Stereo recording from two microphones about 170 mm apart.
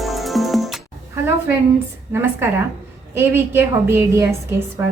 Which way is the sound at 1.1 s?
10° right (ahead or behind).